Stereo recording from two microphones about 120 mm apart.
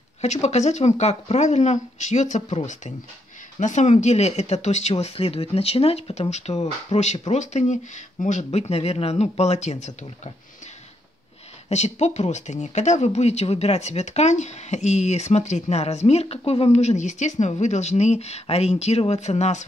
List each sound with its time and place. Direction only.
0.2 s speech: 70° left (ahead or behind)
11.7 s speech: 70° left (ahead or behind)